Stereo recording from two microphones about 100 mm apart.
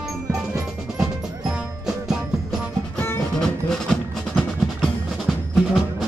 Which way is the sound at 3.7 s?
5° left (ahead or behind).